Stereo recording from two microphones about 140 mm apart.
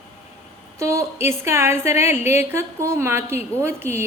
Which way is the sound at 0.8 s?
20° right (ahead or behind).